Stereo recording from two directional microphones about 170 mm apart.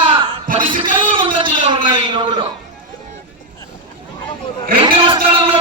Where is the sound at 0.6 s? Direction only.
30° right (ahead or behind).